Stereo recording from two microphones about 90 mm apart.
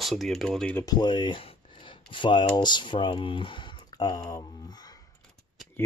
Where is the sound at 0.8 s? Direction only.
50° left (ahead or behind); by 3.8 s 65° left (ahead or behind).